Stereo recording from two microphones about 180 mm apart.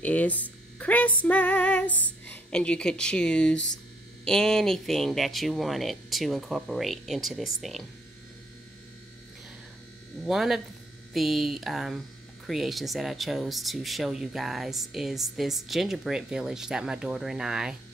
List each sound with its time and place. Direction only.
0.0 s speech: 10° left (ahead or behind)
10.2 s speech: centre (ahead or behind)